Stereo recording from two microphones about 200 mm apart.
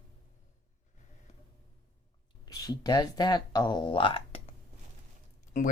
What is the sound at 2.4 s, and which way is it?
Speech, 20° left (ahead or behind).